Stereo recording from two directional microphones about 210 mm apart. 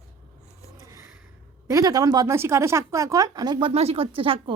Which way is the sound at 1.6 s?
15° right (ahead or behind).